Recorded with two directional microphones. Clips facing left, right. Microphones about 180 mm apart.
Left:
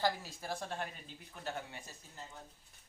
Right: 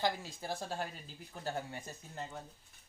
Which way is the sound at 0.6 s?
35° right (ahead or behind).